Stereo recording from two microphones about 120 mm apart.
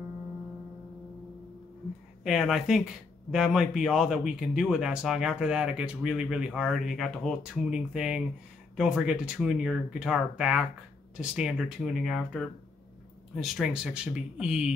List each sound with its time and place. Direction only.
2.2 s speech: centre (ahead or behind)